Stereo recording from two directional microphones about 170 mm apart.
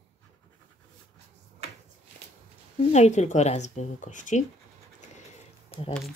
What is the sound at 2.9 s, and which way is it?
Speech, 40° left (ahead or behind).